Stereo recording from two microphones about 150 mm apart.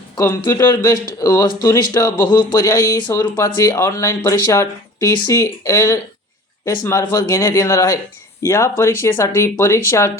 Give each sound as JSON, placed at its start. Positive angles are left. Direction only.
{"t": 0.2, "sound": "speech", "side_deg": 20}